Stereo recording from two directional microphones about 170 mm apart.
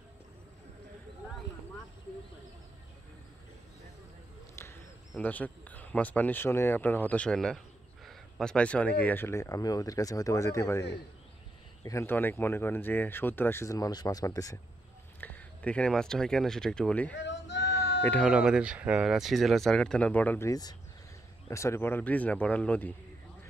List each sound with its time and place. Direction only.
4.6 s speech: 10° left (ahead or behind)
11.8 s speech: 15° left (ahead or behind)
15.1 s speech: 10° left (ahead or behind)
17.1 s a sound: 90° left
17.6 s bleat: 15° left (ahead or behind)
18.2 s speech: 5° right (ahead or behind)